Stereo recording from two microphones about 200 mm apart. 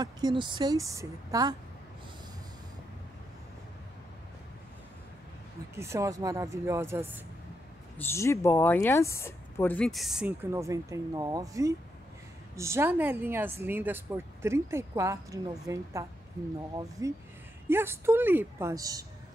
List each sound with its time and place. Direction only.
0.0 s a woman's voice: 20° right (ahead or behind)
5.8 s speech: 15° right (ahead or behind)
8.0 s speech: 15° left (ahead or behind)
10.5 s speech: 15° right (ahead or behind)